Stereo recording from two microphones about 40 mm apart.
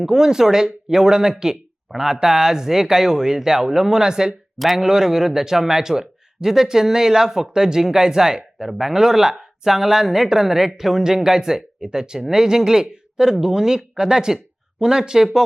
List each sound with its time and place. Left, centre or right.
0.0 s a man's voice: centre
4.5 s speech: centre
4.8 s a man's voice: centre